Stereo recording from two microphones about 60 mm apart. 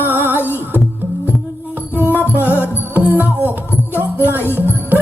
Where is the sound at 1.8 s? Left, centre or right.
Right.